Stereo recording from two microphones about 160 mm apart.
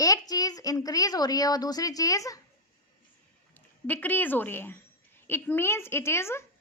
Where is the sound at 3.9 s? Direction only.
10° left (ahead or behind).